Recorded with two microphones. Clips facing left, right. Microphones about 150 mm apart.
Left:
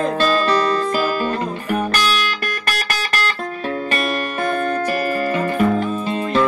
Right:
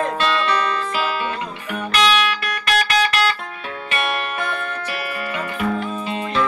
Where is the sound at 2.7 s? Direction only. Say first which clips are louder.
Right 8 dB; 40° left (ahead or behind).